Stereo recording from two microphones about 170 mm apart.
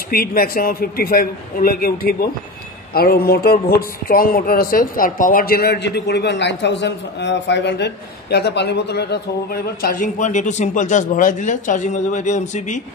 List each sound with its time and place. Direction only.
0.1 s speech: 60° left (ahead or behind)